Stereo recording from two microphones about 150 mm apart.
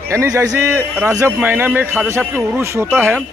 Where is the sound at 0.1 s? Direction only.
20° right (ahead or behind).